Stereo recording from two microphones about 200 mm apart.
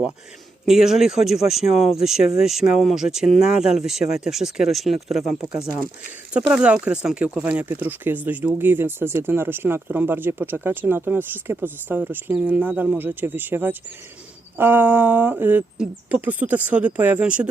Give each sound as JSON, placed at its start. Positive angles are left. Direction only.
{"t": 0.6, "sound": "speech", "side_deg": 0}